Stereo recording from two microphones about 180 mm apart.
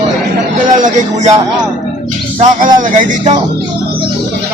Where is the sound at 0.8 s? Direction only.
40° right (ahead or behind).